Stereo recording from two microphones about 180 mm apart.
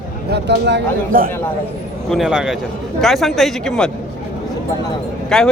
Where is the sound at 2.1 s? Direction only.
5° right (ahead or behind).